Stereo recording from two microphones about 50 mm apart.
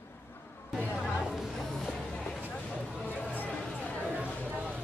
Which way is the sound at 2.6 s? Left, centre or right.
Centre.